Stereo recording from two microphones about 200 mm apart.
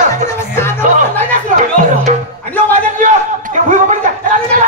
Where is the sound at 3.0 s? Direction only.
35° right (ahead or behind).